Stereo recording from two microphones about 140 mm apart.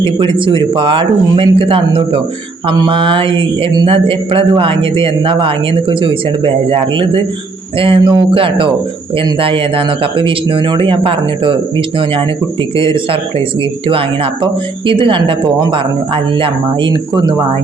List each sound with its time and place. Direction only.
0.0 s speech: 35° right (ahead or behind)
14.4 s speech: 35° right (ahead or behind)